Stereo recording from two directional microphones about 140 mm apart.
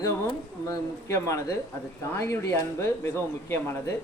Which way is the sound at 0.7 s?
20° left (ahead or behind).